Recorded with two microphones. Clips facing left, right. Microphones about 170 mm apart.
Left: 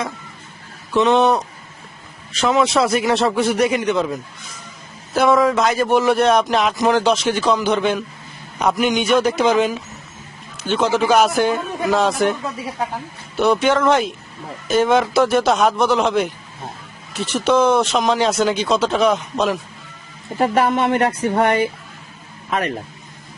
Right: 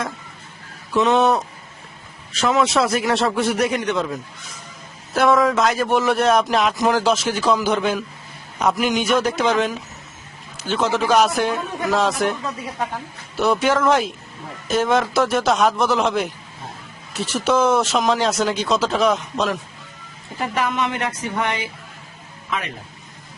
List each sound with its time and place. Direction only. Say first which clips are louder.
0.9 s a man's voice: left 2 dB; centre (ahead or behind)
20.4 s a man's voice: left 6 dB; 45° left (ahead or behind)